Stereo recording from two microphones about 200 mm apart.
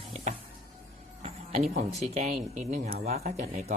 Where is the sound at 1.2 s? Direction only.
30° right (ahead or behind).